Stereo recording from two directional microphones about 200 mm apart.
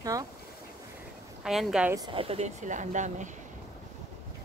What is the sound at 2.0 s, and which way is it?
Speech, 25° right (ahead or behind).